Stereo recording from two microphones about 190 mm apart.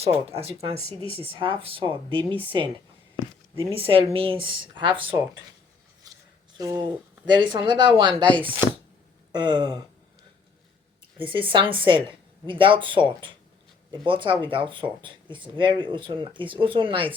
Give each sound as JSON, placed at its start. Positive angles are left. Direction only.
{"t": 0.3, "sound": "speech", "side_deg": -30}
{"t": 6.0, "sound": "a sound", "side_deg": -20}
{"t": 6.6, "sound": "speech", "side_deg": -20}
{"t": 9.3, "sound": "speech", "side_deg": -25}
{"t": 11.2, "sound": "speech", "side_deg": -25}